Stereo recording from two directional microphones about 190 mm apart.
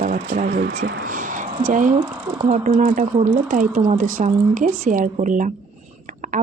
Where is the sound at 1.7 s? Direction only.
45° right (ahead or behind).